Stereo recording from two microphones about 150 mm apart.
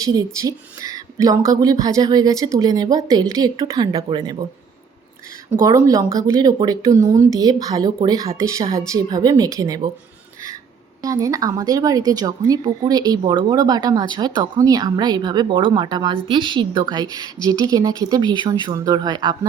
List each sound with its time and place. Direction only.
0.0 s a woman's voice: 25° right (ahead or behind)
5.6 s a woman's voice: 25° right (ahead or behind)
11.0 s a woman's voice: 25° right (ahead or behind)